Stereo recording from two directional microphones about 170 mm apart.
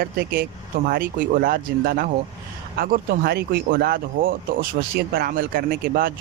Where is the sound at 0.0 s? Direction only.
65° right (ahead or behind).